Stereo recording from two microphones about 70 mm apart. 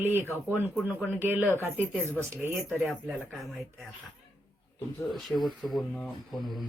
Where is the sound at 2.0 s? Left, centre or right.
Left.